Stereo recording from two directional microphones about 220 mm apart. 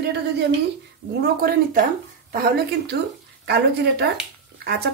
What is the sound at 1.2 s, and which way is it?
Speech, 45° right (ahead or behind).